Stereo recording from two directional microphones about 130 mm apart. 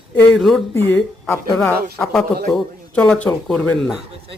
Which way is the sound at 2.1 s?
5° left (ahead or behind).